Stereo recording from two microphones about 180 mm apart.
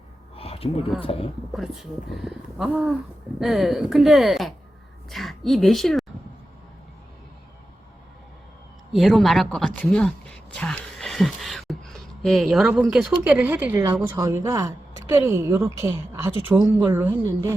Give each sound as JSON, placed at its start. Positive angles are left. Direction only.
{"t": 0.3, "sound": "a sound", "side_deg": 35}
{"t": 1.5, "sound": "a woman's voice", "side_deg": 0}
{"t": 8.9, "sound": "speech", "side_deg": 0}